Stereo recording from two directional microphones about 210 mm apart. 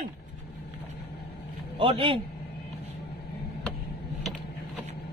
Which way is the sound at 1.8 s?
25° right (ahead or behind).